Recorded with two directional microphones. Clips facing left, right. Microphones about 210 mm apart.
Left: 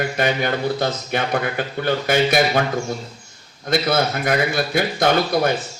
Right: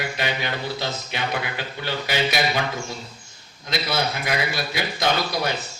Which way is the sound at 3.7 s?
50° left (ahead or behind).